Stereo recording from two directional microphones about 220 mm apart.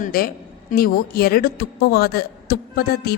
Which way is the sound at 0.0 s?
40° left (ahead or behind).